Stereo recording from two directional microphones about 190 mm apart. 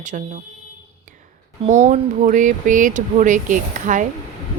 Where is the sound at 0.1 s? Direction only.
45° right (ahead or behind).